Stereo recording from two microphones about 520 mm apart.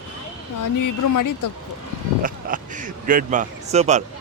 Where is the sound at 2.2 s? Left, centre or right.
Centre.